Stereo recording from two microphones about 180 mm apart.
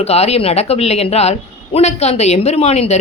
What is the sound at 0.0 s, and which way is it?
Speech, 35° left (ahead or behind).